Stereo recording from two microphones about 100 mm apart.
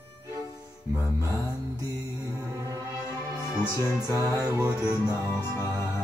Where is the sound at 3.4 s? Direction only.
30° left (ahead or behind).